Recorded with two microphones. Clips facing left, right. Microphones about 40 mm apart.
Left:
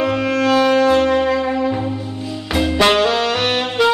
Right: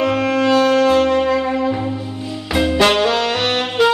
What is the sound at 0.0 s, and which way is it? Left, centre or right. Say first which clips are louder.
Music: right 1 dB; centre.